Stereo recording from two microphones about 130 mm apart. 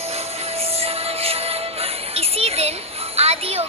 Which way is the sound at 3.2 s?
50° right (ahead or behind).